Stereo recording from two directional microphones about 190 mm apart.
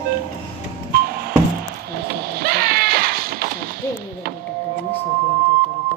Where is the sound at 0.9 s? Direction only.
50° right (ahead or behind).